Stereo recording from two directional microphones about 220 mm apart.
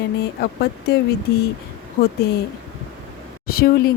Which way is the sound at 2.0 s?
45° left (ahead or behind).